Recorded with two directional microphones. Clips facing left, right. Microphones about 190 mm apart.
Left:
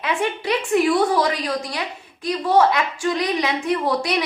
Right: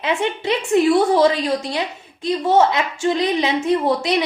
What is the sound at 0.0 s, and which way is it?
A woman's voice, 25° right (ahead or behind).